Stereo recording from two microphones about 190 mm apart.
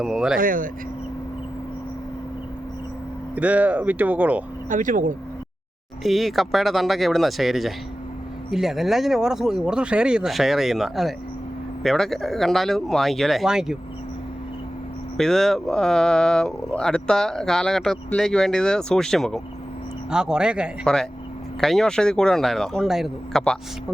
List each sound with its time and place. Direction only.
0.0 s speech: 5° right (ahead or behind)
0.3 s speech: 45° right (ahead or behind)
3.3 s speech: 5° right (ahead or behind)
4.7 s speech: 45° right (ahead or behind)
6.0 s speech: centre (ahead or behind)
15.2 s speech: centre (ahead or behind)